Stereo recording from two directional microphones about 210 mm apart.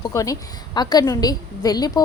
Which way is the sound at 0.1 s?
15° left (ahead or behind).